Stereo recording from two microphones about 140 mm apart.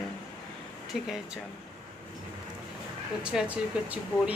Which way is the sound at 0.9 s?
Centre (ahead or behind).